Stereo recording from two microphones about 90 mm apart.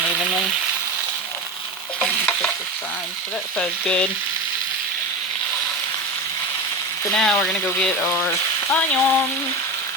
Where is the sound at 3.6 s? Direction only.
15° left (ahead or behind).